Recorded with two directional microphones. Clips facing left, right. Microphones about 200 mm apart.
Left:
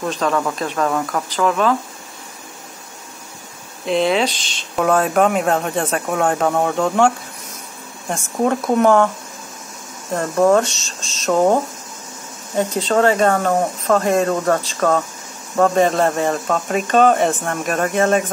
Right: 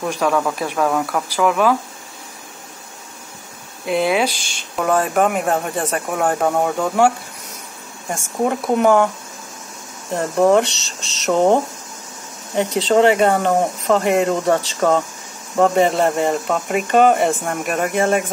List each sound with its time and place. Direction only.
0.0 s speech: 10° right (ahead or behind)
3.8 s speech: 5° right (ahead or behind)
10.1 s speech: 20° right (ahead or behind)
12.8 s speech: 15° right (ahead or behind)